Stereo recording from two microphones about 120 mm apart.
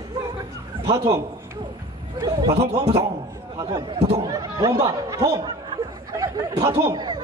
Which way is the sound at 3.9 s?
60° right (ahead or behind).